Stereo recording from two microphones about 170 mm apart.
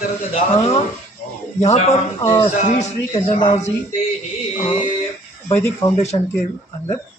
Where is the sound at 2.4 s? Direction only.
40° left (ahead or behind).